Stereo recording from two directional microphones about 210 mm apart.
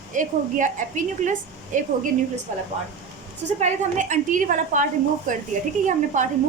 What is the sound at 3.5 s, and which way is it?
A woman's voice, 35° right (ahead or behind).